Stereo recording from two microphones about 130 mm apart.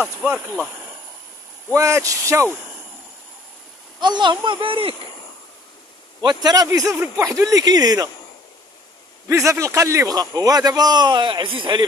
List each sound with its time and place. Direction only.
0.0 s speech: 5° right (ahead or behind)
1.7 s a man's voice: 25° right (ahead or behind)
4.0 s a child's voice: 35° right (ahead or behind)
6.2 s a man's voice: 30° right (ahead or behind)
9.5 s a man's voice: 25° right (ahead or behind); by 11.8 s 40° right (ahead or behind)